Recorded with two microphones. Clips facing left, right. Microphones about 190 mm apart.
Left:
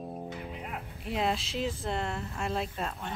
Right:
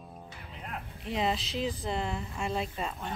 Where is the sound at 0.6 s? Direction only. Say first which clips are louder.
Left 1 dB; 5° left (ahead or behind).